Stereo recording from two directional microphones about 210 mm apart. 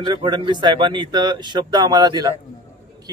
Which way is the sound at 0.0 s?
20° right (ahead or behind).